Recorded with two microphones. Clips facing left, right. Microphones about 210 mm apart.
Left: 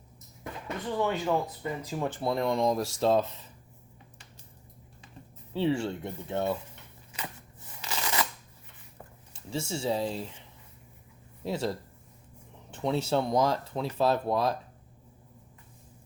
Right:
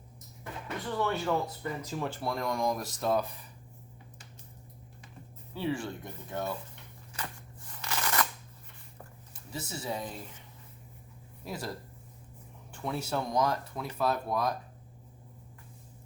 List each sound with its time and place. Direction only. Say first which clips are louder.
0.9 s speech: left 2 dB; 15° left (ahead or behind)
5.5 s speech: left 5 dB; 25° left (ahead or behind)
7.1 s a sound: left 1 dB; 20° left (ahead or behind)
7.7 s shuffling cards: even; 15° left (ahead or behind)
9.3 s speech: left 7 dB; 25° left (ahead or behind)
11.4 s speech: left 7 dB; 25° left (ahead or behind)